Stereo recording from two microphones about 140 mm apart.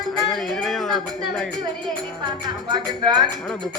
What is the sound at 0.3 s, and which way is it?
Speech, centre (ahead or behind).